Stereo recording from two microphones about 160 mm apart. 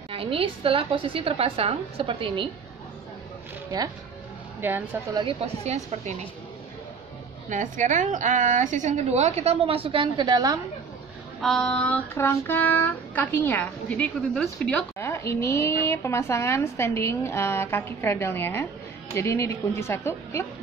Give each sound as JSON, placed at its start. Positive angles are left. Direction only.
{"t": 0.1, "sound": "a woman's voice", "side_deg": -35}
{"t": 4.6, "sound": "a woman's voice", "side_deg": -15}
{"t": 5.2, "sound": "a woman's voice", "side_deg": -40}
{"t": 7.4, "sound": "a woman's voice", "side_deg": -50}
{"t": 11.4, "sound": "speech", "side_deg": 5}
{"t": 15.0, "sound": "speech", "side_deg": 15}